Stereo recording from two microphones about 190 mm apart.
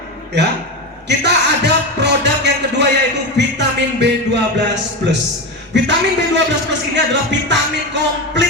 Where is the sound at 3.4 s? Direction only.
65° right (ahead or behind).